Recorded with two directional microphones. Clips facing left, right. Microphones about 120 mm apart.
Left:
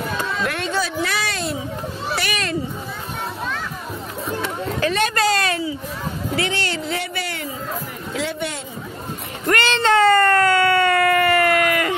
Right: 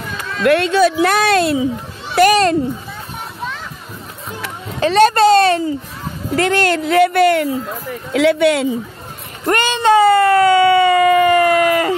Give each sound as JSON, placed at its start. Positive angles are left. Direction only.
{"t": 0.4, "sound": "a child's voice", "side_deg": -75}
{"t": 4.7, "sound": "a child's voice", "side_deg": -30}
{"t": 6.3, "sound": "speech", "side_deg": -50}
{"t": 8.1, "sound": "speech", "side_deg": -75}
{"t": 9.5, "sound": "a sound", "side_deg": -15}